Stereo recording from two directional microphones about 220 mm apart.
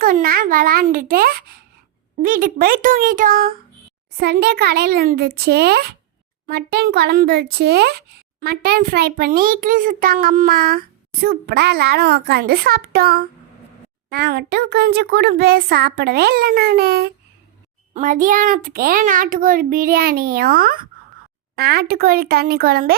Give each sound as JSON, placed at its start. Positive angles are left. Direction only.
{"t": 0.0, "sound": "a child's voice", "side_deg": -40}